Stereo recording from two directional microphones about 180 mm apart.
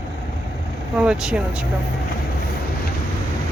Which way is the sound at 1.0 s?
5° right (ahead or behind).